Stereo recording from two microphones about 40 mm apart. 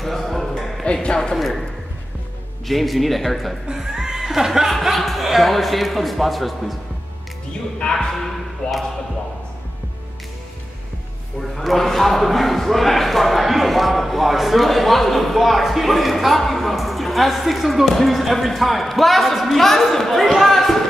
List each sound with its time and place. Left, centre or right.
0.0 s a sound: centre
1.0 s speech: left
1.3 s speech: centre
3.7 s speech: centre
7.9 s speech: centre
11.5 s speech: centre